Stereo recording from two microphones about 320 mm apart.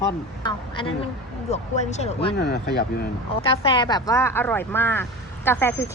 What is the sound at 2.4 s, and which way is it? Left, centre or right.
Speech, left.